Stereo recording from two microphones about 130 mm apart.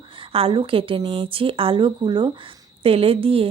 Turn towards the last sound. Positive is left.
turn(degrees=-45)  # may be behind; listen again after turning